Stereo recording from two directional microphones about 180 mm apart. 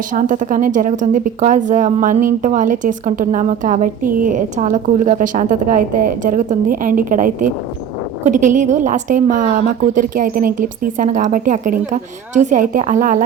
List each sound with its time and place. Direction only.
0.1 s a woman's voice: 45° right (ahead or behind)